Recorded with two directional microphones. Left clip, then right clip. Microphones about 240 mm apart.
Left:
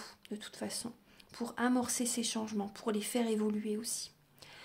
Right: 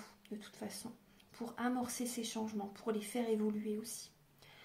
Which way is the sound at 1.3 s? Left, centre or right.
Left.